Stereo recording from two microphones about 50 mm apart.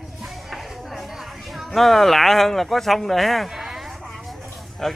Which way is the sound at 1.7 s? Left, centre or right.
Centre.